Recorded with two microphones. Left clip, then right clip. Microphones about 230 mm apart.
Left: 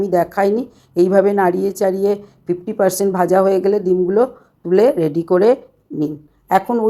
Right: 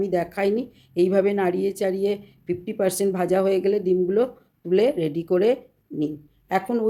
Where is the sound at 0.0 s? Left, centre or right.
Centre.